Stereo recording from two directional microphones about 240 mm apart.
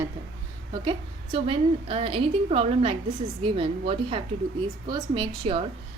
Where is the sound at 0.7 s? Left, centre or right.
Right.